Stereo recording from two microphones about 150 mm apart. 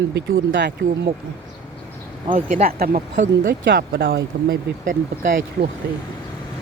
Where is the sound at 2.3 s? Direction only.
70° right (ahead or behind).